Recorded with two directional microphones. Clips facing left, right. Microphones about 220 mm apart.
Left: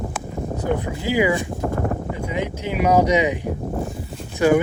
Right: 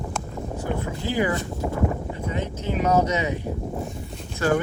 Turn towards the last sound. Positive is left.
turn(degrees=15)  # may be behind; listen again after turning